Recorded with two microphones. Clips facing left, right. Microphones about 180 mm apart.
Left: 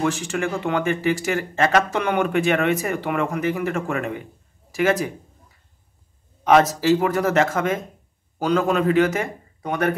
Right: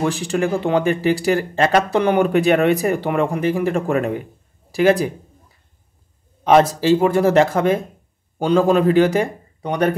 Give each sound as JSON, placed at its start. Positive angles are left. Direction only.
{"t": 0.0, "sound": "speech", "side_deg": -35}
{"t": 6.4, "sound": "speech", "side_deg": -30}